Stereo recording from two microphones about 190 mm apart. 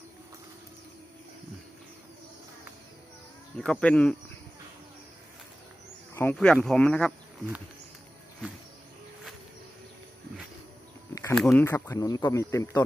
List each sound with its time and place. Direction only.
3.6 s speech: 5° left (ahead or behind)
6.1 s speech: 10° left (ahead or behind)
11.1 s insect: 15° left (ahead or behind)
11.3 s speech: 5° left (ahead or behind)